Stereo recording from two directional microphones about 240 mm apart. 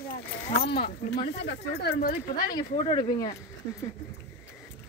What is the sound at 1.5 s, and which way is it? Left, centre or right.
Speech, left.